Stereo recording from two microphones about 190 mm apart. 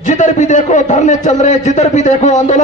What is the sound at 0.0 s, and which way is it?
A man's voice, 40° left (ahead or behind).